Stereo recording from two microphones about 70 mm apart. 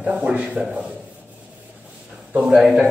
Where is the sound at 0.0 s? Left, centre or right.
Right.